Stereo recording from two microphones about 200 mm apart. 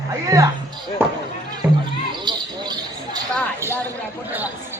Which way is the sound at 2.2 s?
20° right (ahead or behind).